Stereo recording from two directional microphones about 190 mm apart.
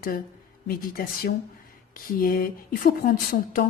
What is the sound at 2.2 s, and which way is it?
Speech, 50° left (ahead or behind).